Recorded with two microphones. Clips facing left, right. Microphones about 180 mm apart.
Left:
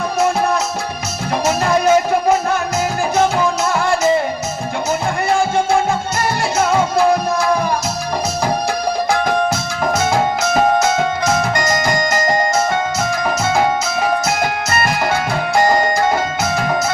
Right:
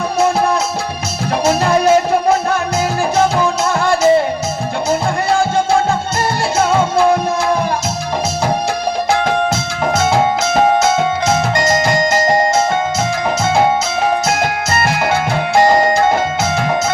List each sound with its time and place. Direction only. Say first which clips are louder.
1.5 s music: right 2 dB; 30° right (ahead or behind)
10.0 s music: right 4 dB; 25° right (ahead or behind)
15.5 s music: right 3 dB; 25° right (ahead or behind)